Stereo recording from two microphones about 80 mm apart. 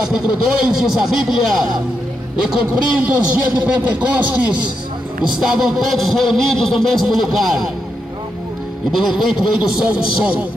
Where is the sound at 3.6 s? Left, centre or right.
Centre.